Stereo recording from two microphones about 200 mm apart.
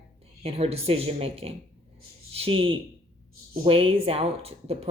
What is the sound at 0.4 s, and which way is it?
Speech, 30° right (ahead or behind).